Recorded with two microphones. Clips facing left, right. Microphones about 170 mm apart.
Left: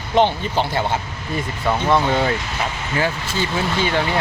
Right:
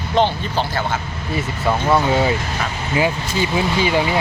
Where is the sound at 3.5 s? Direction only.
10° right (ahead or behind).